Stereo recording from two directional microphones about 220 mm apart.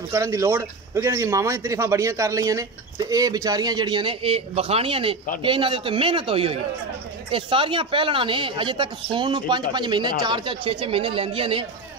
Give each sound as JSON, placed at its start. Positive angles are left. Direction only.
{"t": 0.1, "sound": "speech", "side_deg": -15}